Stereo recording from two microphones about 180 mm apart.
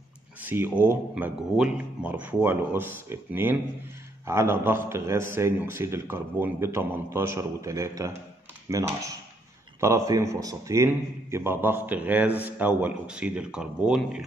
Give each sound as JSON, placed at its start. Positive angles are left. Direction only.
{"t": 0.4, "sound": "a man's voice", "side_deg": -10}